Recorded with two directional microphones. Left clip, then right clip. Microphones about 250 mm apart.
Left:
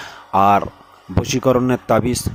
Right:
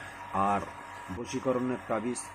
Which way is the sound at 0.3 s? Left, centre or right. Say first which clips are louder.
Left 15 dB; left.